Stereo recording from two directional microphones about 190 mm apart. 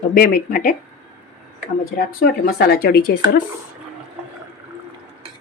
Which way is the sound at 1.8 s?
50° left (ahead or behind).